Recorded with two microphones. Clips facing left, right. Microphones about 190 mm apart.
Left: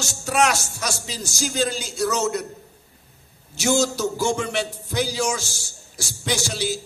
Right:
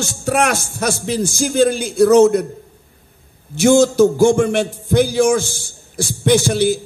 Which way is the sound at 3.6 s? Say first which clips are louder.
Right 10 dB; 55° right (ahead or behind).